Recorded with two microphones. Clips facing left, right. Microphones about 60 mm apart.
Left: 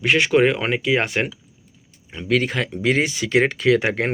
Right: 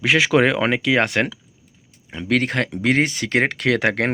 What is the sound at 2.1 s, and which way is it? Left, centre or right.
Speech, right.